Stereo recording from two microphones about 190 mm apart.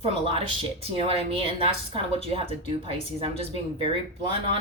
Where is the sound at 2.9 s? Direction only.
30° right (ahead or behind).